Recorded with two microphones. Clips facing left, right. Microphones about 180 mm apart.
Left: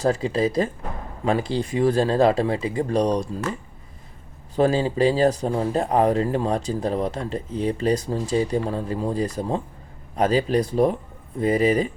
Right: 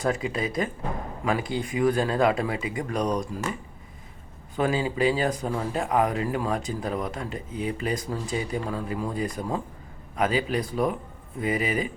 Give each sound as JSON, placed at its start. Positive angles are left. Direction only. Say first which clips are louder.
{"t": 0.0, "sound": "speech", "louder": "left 6 dB", "side_deg": 30}
{"t": 4.5, "sound": "speech", "louder": "left 5 dB", "side_deg": 35}